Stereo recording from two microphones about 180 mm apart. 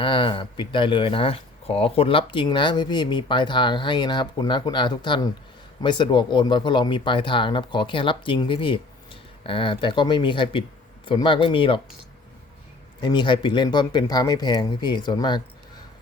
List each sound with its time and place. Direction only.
0.0 s speech: 30° left (ahead or behind)
13.0 s speech: 25° left (ahead or behind)